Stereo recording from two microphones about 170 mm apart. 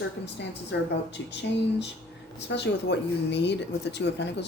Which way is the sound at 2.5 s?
90° left.